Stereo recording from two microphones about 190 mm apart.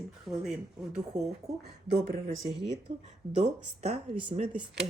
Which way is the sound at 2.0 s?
50° right (ahead or behind).